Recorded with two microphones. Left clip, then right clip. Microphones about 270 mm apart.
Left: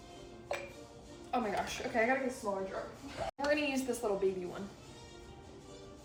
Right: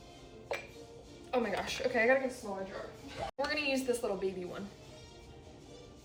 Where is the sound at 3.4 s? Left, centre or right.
Centre.